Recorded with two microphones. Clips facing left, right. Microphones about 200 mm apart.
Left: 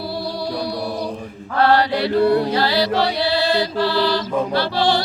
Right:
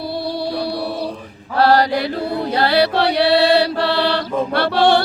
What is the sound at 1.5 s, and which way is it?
Mantra, 40° right (ahead or behind).